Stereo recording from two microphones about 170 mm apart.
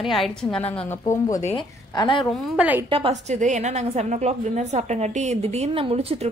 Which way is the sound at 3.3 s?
45° right (ahead or behind).